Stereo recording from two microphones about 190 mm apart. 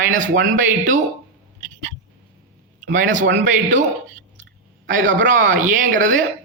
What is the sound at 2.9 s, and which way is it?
Speech, 45° right (ahead or behind).